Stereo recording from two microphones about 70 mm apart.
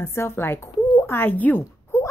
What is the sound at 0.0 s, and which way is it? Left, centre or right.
A woman's voice, left.